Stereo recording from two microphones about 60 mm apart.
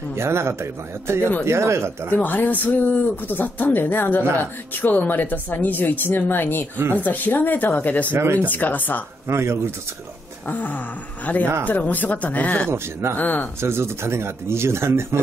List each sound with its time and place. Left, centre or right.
0.1 s speech: right
2.1 s a woman's voice: left
8.1 s speech: right
8.5 s speech: left
9.3 s speech: right
10.4 s a woman's voice: left
12.7 s speech: right
13.2 s a woman's voice: left
13.6 s speech: right